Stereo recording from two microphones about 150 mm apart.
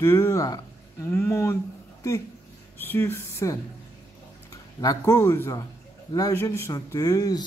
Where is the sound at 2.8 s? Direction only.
15° left (ahead or behind).